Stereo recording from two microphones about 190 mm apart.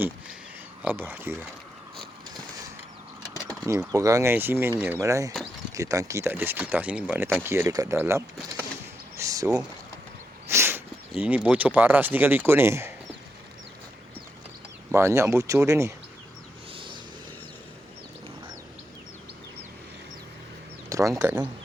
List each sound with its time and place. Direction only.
0.8 s speech: 10° right (ahead or behind)
3.4 s speech: 20° right (ahead or behind)
9.1 s a sound: 15° right (ahead or behind)
10.5 s dog: 10° right (ahead or behind)
11.1 s speech: 5° right (ahead or behind)
14.9 s speech: 15° right (ahead or behind)
16.7 s vehicle: 25° right (ahead or behind)
20.9 s speech: 15° right (ahead or behind)